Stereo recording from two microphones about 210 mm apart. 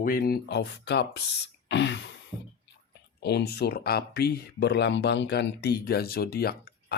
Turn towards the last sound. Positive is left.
turn(degrees=50)  # may be behind; listen again after turning